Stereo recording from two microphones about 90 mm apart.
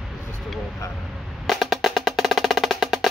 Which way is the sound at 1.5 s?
Centre (ahead or behind).